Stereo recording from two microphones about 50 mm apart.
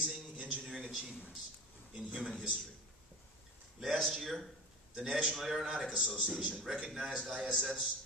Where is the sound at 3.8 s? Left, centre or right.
Centre.